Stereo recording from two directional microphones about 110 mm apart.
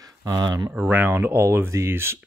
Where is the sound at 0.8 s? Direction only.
15° right (ahead or behind).